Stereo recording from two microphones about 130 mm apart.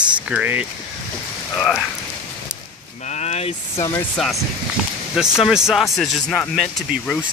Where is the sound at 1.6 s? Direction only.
5° left (ahead or behind).